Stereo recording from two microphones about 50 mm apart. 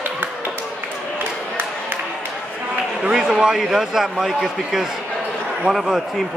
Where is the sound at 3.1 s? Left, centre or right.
Centre.